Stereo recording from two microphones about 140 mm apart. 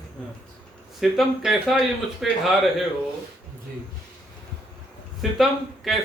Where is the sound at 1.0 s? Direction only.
Centre (ahead or behind).